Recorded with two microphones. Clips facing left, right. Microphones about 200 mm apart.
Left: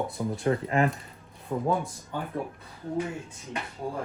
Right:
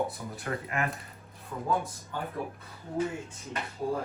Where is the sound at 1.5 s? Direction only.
40° left (ahead or behind).